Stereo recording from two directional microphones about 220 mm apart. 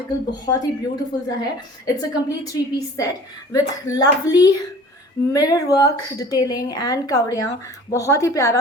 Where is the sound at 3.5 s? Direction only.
15° left (ahead or behind).